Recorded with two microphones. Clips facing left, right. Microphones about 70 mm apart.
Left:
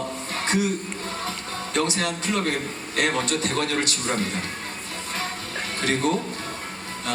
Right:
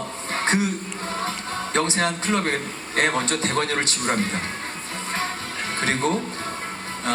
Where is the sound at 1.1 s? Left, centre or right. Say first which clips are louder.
Right 6 dB; right.